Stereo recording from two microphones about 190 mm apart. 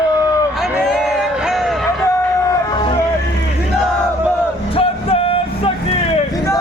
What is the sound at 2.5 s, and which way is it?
Music, 25° left (ahead or behind).